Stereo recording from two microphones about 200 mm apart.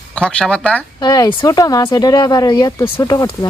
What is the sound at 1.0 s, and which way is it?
Speech, 20° left (ahead or behind).